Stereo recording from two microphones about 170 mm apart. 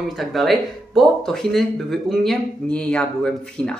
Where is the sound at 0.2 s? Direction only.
Centre (ahead or behind).